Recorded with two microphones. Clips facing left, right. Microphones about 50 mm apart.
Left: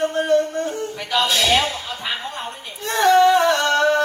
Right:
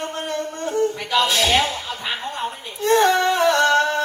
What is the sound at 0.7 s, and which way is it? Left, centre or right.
Music, right.